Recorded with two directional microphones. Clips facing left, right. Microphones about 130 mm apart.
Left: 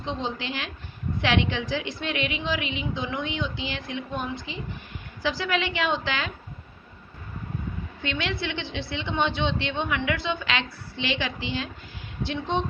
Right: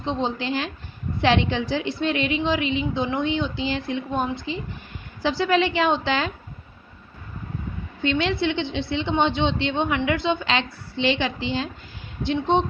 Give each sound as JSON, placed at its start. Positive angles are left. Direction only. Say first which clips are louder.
{"t": 0.0, "sound": "a woman's voice", "louder": "right 5 dB", "side_deg": -30}
{"t": 8.0, "sound": "a woman's voice", "louder": "right 8 dB", "side_deg": -30}